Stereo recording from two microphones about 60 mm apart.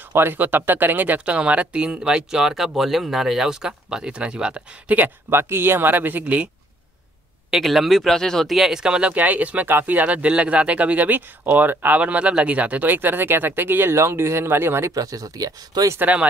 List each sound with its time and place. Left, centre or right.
0.1 s speech: right; by 4.9 s centre
5.3 s speech: right
7.6 s speech: centre
9.1 s speech: right
13.9 s speech: right
14.9 s speech: right
16.0 s speech: right